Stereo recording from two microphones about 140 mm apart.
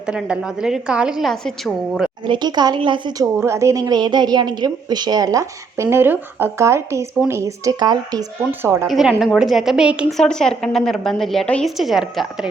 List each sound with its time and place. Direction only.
0.0 s a woman's voice: 5° right (ahead or behind)
2.2 s a woman's voice: 35° right (ahead or behind)
8.4 s a woman's voice: 20° right (ahead or behind)
8.9 s a woman's voice: centre (ahead or behind)
10.2 s a woman's voice: 5° left (ahead or behind)